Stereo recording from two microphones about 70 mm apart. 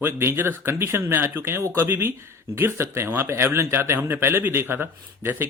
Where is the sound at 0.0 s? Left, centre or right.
Right.